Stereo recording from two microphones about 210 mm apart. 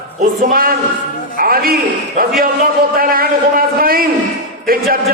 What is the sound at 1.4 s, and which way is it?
A man's voice, 45° right (ahead or behind).